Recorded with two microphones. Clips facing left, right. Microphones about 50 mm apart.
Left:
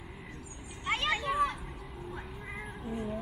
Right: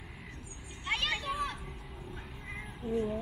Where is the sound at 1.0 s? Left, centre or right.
Centre.